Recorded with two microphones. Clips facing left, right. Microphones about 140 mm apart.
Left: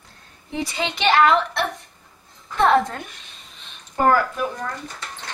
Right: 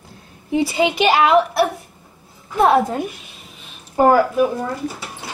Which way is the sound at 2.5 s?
10° right (ahead or behind).